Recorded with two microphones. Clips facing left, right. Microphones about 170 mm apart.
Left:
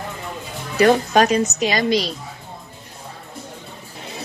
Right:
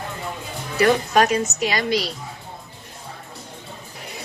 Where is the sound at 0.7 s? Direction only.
25° left (ahead or behind).